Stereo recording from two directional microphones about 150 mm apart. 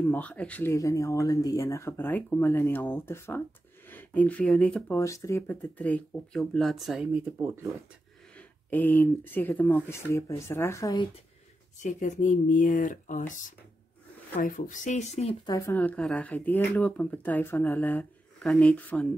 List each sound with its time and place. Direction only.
0.0 s speech: 10° left (ahead or behind)
4.9 s speech: 20° left (ahead or behind); by 7.1 s centre (ahead or behind)
8.4 s speech: 10° left (ahead or behind)
11.8 s speech: 55° left (ahead or behind)
14.4 s speech: 60° left (ahead or behind)
15.4 s speech: 20° left (ahead or behind)